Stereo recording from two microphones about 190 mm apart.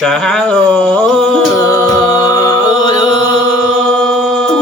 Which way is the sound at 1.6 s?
20° left (ahead or behind).